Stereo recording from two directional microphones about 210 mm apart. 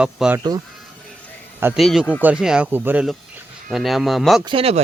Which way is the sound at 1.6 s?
10° right (ahead or behind).